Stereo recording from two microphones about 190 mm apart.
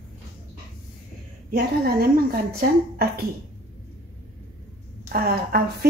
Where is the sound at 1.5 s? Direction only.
55° right (ahead or behind).